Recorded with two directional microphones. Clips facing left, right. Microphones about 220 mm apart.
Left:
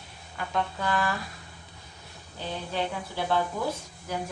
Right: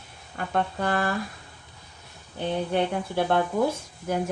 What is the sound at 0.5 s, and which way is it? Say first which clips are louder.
Speech: right 3 dB; 55° right (ahead or behind).